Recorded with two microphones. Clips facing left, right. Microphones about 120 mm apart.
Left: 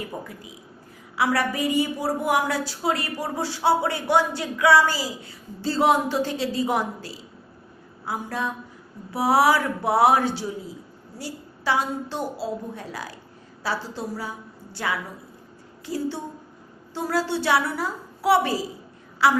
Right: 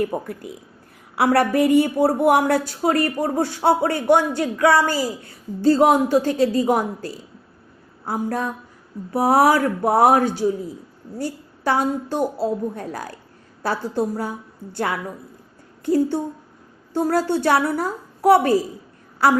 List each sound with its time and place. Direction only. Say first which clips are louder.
0.0 s a woman's voice: right 10 dB; 55° right (ahead or behind)